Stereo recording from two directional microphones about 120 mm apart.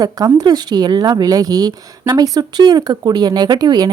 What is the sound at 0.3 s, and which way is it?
A woman's voice, 35° right (ahead or behind).